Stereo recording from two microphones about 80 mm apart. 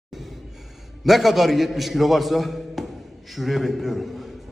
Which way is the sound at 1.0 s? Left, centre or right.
Centre.